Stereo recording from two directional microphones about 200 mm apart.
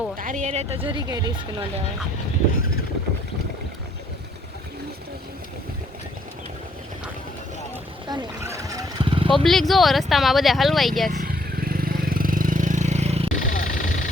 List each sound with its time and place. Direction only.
0.2 s speech: 40° right (ahead or behind)
0.9 s speech: 20° right (ahead or behind)
8.1 s a sound: 15° right (ahead or behind)
9.3 s speech: centre (ahead or behind)
11.1 s vehicle: 45° right (ahead or behind)
13.4 s vehicle: 40° left (ahead or behind)